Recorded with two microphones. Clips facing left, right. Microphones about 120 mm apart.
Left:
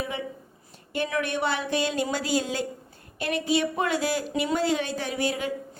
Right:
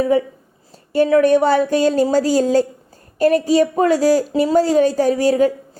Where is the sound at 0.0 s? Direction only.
40° right (ahead or behind).